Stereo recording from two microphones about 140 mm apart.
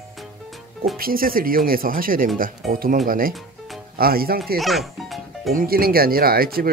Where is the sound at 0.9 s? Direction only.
90° right.